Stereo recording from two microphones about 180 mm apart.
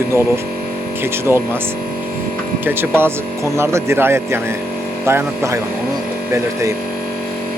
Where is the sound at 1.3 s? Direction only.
15° right (ahead or behind).